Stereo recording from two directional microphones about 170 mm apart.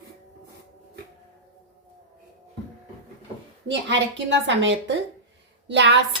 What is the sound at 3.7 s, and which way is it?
A woman's voice, 90° right.